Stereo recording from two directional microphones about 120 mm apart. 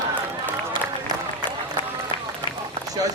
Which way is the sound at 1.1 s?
35° right (ahead or behind).